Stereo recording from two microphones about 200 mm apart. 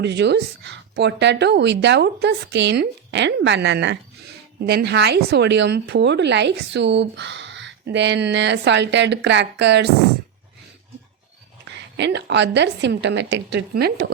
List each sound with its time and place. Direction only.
0.0 s a woman's voice: 60° right (ahead or behind)
11.7 s a woman's voice: 60° right (ahead or behind)